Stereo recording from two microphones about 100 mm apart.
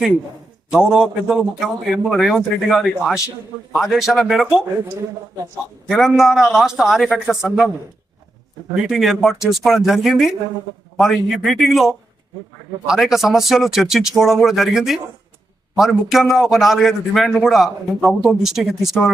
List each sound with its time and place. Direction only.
0.7 s a man's voice: 5° right (ahead or behind)
5.9 s a man's voice: centre (ahead or behind)
8.7 s a man's voice: 5° right (ahead or behind)